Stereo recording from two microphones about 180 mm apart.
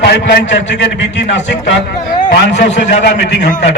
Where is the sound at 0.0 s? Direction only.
65° left (ahead or behind).